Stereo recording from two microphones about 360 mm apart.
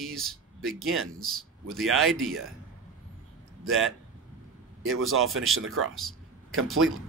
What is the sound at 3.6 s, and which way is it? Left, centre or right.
Speech, right.